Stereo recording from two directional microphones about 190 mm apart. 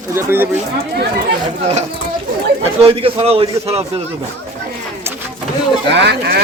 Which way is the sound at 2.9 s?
30° right (ahead or behind).